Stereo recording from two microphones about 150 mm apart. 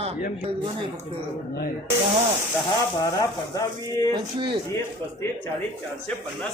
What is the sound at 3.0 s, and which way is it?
Speech, 25° left (ahead or behind).